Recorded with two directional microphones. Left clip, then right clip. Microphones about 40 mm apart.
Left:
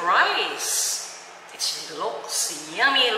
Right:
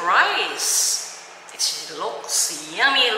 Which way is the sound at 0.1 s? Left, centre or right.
Centre.